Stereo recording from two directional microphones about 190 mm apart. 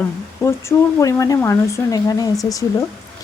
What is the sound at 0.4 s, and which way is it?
Speech, 15° left (ahead or behind).